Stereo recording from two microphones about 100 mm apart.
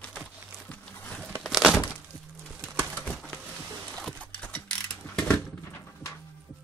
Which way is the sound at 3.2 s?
5° left (ahead or behind).